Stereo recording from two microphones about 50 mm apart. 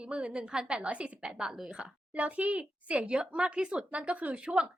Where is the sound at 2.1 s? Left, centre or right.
Right.